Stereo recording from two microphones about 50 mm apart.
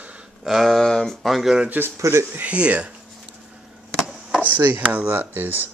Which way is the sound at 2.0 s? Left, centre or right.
Right.